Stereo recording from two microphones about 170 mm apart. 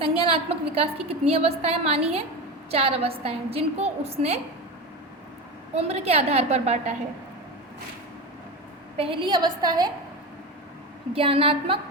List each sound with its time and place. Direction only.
0.0 s a woman's voice: 35° right (ahead or behind)
5.7 s a woman's voice: 40° right (ahead or behind)
9.0 s a woman's voice: 30° right (ahead or behind)
11.1 s a woman's voice: 35° right (ahead or behind)